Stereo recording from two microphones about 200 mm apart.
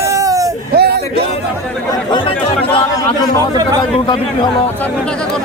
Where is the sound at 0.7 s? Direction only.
55° right (ahead or behind).